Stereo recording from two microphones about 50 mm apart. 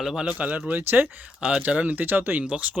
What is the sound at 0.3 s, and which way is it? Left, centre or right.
Speech, right.